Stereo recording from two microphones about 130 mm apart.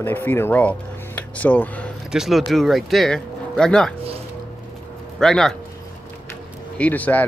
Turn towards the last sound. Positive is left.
turn(degrees=10)  # may be behind; listen again after turning